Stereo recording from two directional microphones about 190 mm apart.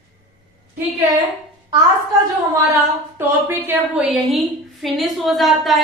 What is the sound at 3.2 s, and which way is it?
A woman's voice, 10° right (ahead or behind).